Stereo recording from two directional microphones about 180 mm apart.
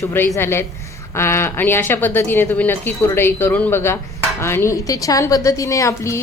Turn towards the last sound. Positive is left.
turn(degrees=15)  # may be behind; listen again after turning